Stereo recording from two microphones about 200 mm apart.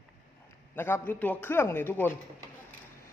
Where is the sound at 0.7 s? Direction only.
10° left (ahead or behind).